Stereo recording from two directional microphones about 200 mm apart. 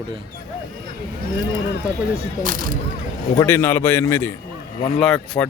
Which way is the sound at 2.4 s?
45° right (ahead or behind).